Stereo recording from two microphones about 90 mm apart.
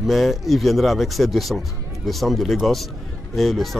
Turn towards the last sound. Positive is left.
turn(degrees=0)  # may be behind; listen again after turning